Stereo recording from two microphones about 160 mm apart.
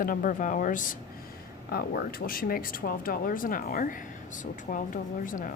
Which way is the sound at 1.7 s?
70° left (ahead or behind).